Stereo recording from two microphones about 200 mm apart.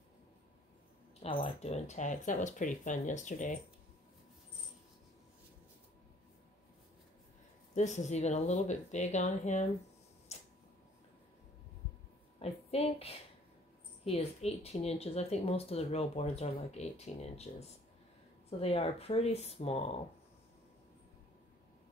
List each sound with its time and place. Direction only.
1.2 s speech: 25° left (ahead or behind)
7.7 s speech: 35° left (ahead or behind)
12.4 s a woman's voice: 30° left (ahead or behind)